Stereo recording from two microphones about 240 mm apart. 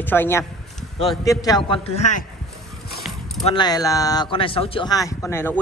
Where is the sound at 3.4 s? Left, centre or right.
Centre.